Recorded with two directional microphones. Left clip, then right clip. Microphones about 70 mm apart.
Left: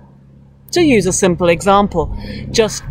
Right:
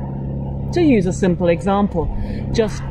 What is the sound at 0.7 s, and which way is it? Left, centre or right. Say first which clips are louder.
A man's voice: left 4 dB; left.